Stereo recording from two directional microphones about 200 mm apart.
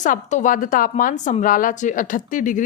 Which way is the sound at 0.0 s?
35° left (ahead or behind).